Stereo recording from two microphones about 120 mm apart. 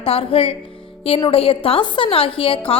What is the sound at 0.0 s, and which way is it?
A woman's voice, 50° left (ahead or behind).